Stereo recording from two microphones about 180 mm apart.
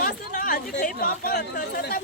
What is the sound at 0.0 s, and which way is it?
Speech, 50° left (ahead or behind).